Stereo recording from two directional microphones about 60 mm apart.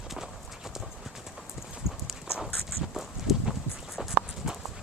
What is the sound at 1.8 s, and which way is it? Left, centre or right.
Clip-clop, left.